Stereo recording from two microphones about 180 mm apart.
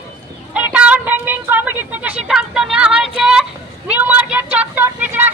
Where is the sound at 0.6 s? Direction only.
5° right (ahead or behind).